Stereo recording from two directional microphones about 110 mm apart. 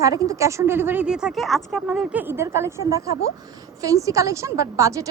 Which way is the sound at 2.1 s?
20° right (ahead or behind).